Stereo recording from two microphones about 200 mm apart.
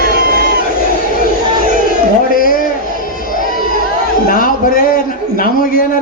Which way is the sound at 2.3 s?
45° left (ahead or behind).